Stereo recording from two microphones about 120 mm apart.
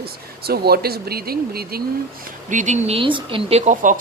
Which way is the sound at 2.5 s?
85° right.